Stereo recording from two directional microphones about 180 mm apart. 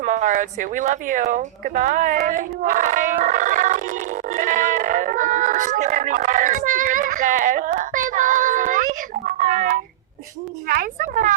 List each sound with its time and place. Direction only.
0.0 s a woman's voice: 45° right (ahead or behind)